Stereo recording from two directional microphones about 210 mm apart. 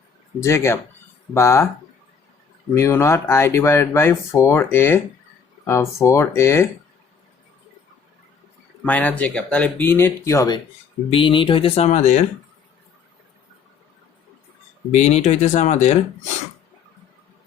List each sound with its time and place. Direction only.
0.3 s speech: 10° left (ahead or behind)
2.7 s speech: 15° left (ahead or behind)
8.8 s speech: 5° left (ahead or behind); by 12.2 s 35° left (ahead or behind)
14.9 s speech: 35° left (ahead or behind)